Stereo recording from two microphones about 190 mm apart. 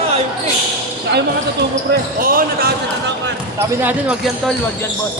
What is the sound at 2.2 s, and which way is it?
Speech, 50° right (ahead or behind).